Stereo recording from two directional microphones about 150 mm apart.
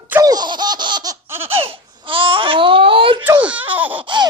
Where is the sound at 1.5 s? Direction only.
40° right (ahead or behind).